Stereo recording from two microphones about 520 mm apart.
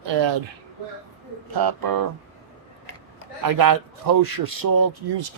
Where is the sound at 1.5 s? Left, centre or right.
Right.